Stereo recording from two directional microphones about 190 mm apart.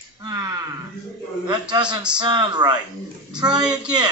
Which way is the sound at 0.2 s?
20° right (ahead or behind).